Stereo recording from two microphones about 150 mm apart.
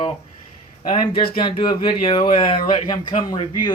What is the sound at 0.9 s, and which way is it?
Speech, 30° left (ahead or behind).